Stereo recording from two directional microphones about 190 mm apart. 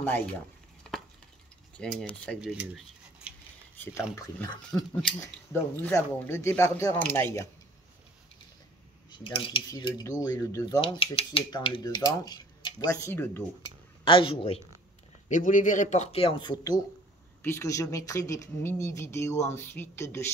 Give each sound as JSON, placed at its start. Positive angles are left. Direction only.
{"t": 0.8, "sound": "chopping", "side_deg": 0}
{"t": 1.8, "sound": "cutlery", "side_deg": 5}
{"t": 3.7, "sound": "speech", "side_deg": 10}
{"t": 9.1, "sound": "speech", "side_deg": 30}
{"t": 14.0, "sound": "speech", "side_deg": 30}
{"t": 15.2, "sound": "speech", "side_deg": 40}